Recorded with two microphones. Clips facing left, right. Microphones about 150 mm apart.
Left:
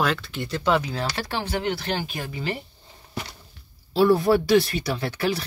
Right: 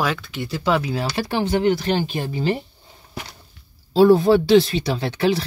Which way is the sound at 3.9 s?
25° right (ahead or behind).